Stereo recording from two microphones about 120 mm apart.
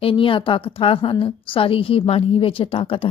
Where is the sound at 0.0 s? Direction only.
50° left (ahead or behind).